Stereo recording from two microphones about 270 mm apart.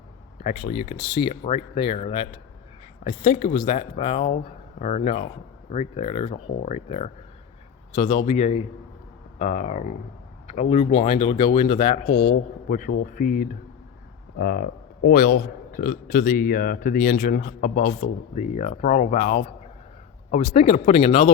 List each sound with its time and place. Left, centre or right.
0.4 s a man's voice: left